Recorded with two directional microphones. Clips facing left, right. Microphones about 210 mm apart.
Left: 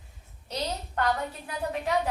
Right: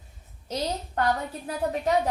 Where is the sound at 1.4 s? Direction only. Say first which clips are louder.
Right 6 dB; 40° right (ahead or behind).